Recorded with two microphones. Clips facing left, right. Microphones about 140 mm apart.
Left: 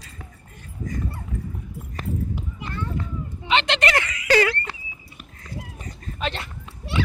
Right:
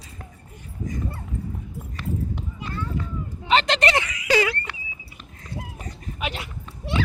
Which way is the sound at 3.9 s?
15° right (ahead or behind).